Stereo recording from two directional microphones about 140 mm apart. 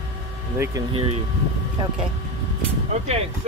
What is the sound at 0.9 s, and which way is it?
Speech, 40° right (ahead or behind).